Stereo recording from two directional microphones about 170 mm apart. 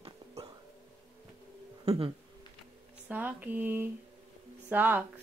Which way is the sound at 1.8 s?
35° right (ahead or behind).